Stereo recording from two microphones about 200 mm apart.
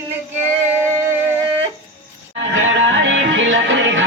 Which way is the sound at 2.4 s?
65° right (ahead or behind).